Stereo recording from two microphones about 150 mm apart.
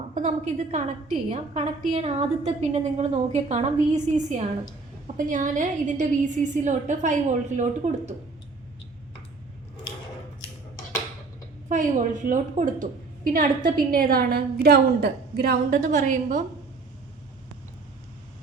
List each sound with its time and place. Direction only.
0.1 s a woman's voice: 50° right (ahead or behind)
1.1 s a woman's voice: 40° right (ahead or behind)
11.7 s a woman's voice: 60° right (ahead or behind)
13.7 s a woman's voice: 75° right (ahead or behind)
15.8 s a woman's voice: 55° right (ahead or behind)